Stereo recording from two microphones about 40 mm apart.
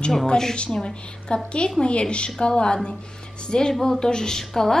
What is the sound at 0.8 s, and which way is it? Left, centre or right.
A woman's voice, left.